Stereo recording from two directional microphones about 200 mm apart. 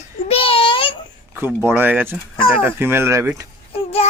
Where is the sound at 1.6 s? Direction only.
10° right (ahead or behind).